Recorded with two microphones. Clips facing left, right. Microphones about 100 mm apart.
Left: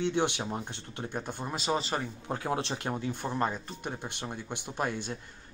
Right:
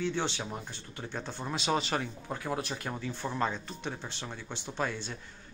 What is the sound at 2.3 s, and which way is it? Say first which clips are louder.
Speech: left 3 dB; 30° left (ahead or behind).